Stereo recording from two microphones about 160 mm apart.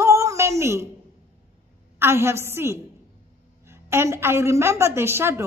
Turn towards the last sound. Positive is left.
turn(degrees=-15)  # may be behind; listen again after turning